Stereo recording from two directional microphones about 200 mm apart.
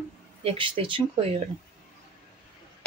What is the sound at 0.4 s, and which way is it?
A woman's voice, 25° right (ahead or behind).